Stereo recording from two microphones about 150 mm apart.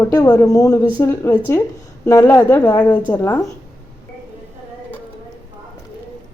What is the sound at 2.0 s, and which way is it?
Speech, 20° left (ahead or behind).